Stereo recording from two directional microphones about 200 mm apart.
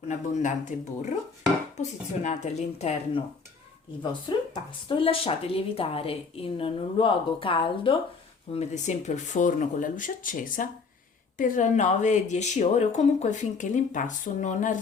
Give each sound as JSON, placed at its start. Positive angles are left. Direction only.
{"t": 0.1, "sound": "speech", "side_deg": 40}
{"t": 4.3, "sound": "a woman's voice", "side_deg": 20}
{"t": 8.5, "sound": "speech", "side_deg": 35}